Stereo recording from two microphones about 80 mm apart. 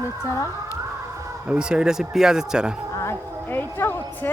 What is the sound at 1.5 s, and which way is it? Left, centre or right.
Speech, centre.